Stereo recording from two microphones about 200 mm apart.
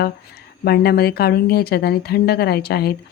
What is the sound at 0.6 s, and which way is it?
Speech, 50° left (ahead or behind).